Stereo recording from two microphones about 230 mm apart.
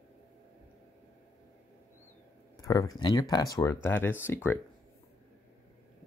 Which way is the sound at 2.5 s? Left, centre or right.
Centre.